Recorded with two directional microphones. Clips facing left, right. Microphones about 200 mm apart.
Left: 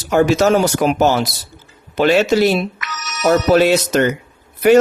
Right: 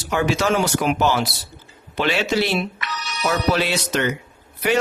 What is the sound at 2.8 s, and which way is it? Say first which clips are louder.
Telephone bell ringing: even; 30° right (ahead or behind).